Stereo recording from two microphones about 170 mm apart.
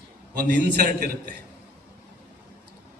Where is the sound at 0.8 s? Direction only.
55° right (ahead or behind).